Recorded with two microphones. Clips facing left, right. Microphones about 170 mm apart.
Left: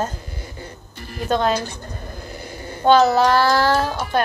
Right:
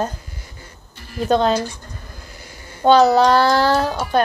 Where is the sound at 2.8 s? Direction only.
20° right (ahead or behind).